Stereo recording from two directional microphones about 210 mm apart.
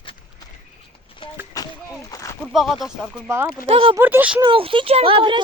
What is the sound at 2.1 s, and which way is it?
Speech, 15° left (ahead or behind).